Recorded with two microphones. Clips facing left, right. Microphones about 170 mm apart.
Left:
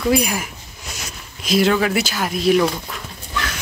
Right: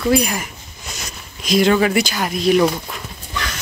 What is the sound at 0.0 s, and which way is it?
Speech, 5° left (ahead or behind).